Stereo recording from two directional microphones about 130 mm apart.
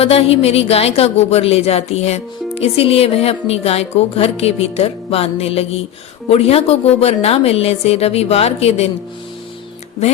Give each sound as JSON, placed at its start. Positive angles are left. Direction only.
{"t": 0.0, "sound": "speech", "side_deg": 50}